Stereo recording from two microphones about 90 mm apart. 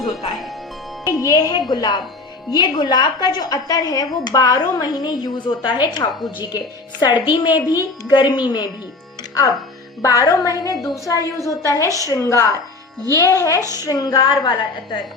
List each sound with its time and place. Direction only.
1.2 s a woman's voice: 40° left (ahead or behind)
10.0 s a woman's voice: 40° left (ahead or behind)
13.6 s speech: 30° right (ahead or behind)
13.8 s a woman's voice: 45° left (ahead or behind); by 15.0 s 60° left (ahead or behind)